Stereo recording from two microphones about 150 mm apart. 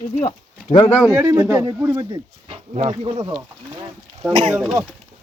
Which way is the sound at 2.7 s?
50° right (ahead or behind).